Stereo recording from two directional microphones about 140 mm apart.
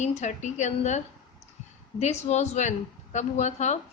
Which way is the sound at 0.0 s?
55° left (ahead or behind).